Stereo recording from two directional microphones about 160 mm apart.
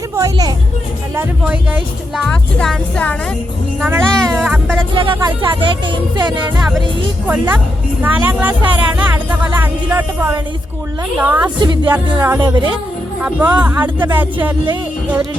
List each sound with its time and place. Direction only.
0.2 s music: 25° right (ahead or behind)
1.1 s speech: 10° right (ahead or behind)
2.2 s speech: 5° left (ahead or behind)
3.8 s speech: 10° right (ahead or behind)
4.2 s cat: centre (ahead or behind)
4.8 s speech: 30° right (ahead or behind)
7.3 s speech: 10° right (ahead or behind)
11.6 s speech: 30° right (ahead or behind)
11.9 s speech: 10° right (ahead or behind)
12.4 s speech: 30° right (ahead or behind)
13.2 s speech: 5° right (ahead or behind)